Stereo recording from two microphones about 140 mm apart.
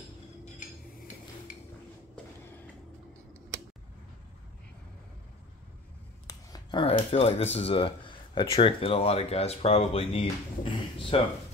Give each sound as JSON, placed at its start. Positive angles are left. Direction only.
{"t": 6.2, "sound": "speech", "side_deg": 30}